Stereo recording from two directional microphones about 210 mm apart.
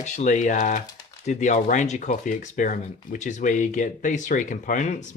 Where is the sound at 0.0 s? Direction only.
35° left (ahead or behind).